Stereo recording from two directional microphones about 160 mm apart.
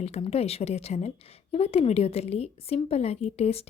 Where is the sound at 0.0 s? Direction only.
40° left (ahead or behind).